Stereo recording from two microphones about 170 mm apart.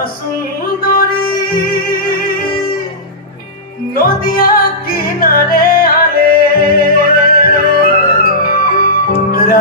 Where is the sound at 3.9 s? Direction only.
60° left (ahead or behind).